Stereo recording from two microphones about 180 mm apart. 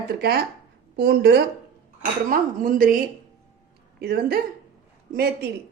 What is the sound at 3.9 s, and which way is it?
Speech, 60° right (ahead or behind).